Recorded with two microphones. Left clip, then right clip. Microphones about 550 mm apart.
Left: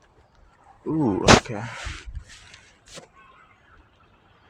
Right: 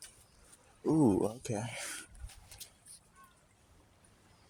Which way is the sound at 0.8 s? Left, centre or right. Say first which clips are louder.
Left 11 dB; right.